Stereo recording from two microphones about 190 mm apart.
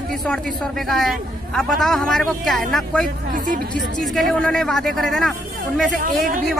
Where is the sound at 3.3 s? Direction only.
45° right (ahead or behind).